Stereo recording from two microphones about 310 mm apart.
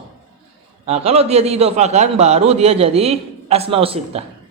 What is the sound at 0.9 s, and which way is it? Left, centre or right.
A man's voice, centre.